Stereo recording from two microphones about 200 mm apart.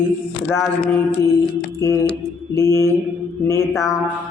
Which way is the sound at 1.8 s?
15° left (ahead or behind).